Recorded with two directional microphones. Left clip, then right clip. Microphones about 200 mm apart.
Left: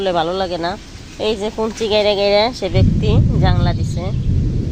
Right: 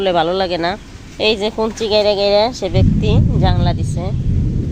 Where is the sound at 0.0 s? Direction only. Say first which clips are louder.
Right 2 dB; 15° right (ahead or behind).